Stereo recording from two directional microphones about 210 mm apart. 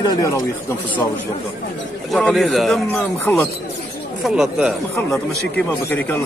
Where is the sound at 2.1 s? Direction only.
Centre (ahead or behind).